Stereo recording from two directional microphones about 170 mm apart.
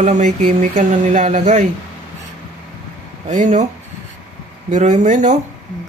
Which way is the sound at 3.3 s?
45° right (ahead or behind).